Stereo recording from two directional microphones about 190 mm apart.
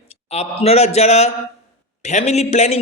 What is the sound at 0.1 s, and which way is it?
A man's voice, 35° left (ahead or behind).